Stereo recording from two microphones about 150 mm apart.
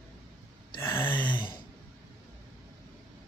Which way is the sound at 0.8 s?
15° left (ahead or behind).